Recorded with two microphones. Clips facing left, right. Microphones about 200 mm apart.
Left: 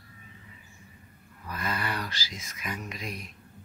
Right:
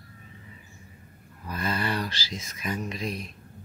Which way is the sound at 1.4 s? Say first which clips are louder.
Right 4 dB; 30° right (ahead or behind).